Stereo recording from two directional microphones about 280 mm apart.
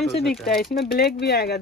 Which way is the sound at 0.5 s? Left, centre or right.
Left.